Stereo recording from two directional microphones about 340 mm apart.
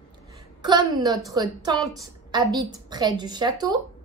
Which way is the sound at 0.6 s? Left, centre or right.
Centre.